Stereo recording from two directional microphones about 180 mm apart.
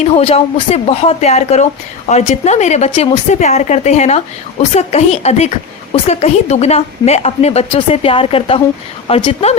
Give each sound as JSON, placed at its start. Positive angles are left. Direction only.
{"t": 0.0, "sound": "a woman's voice", "side_deg": 35}